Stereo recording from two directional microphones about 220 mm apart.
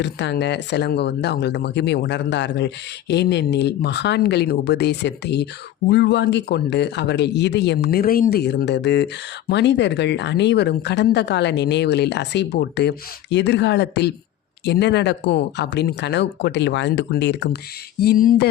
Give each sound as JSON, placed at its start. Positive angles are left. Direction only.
{"t": 0.0, "sound": "speech", "side_deg": 50}